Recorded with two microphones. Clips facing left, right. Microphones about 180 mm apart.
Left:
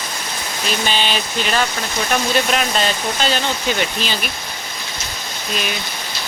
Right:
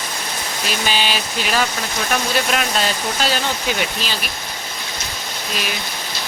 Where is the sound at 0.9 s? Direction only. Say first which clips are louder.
Right 1 dB; 10° right (ahead or behind).